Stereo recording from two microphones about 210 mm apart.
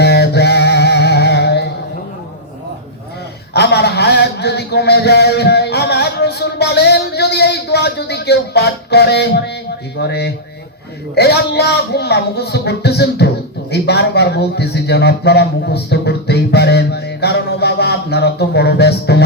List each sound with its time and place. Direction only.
0.0 s music: 50° left (ahead or behind)
3.5 s a sound: 50° left (ahead or behind)
10.0 s music: 50° left (ahead or behind)
11.1 s speech: 50° left (ahead or behind)